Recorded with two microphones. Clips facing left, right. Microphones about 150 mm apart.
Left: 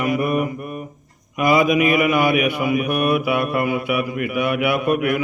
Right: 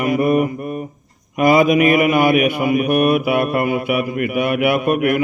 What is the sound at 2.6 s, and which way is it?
Mantra, 60° right (ahead or behind).